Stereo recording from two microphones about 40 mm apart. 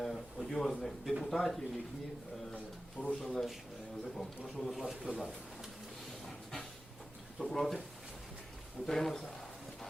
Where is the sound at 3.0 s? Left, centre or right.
Right.